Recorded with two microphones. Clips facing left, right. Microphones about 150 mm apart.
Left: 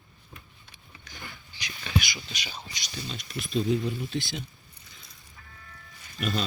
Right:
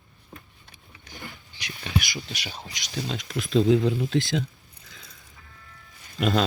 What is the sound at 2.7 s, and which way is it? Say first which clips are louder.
Speech: right 10 dB; 90° right.